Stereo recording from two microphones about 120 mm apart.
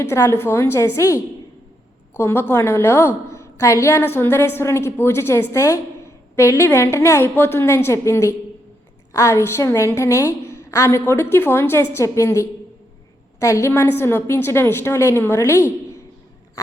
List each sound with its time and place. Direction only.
0.0 s a woman's voice: 20° left (ahead or behind)